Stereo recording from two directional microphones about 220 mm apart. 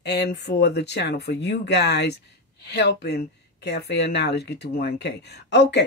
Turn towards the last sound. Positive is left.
turn(degrees=50)  # may be behind; listen again after turning